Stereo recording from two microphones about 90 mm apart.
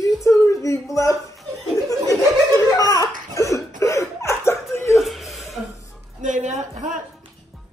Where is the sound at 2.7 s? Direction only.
45° left (ahead or behind).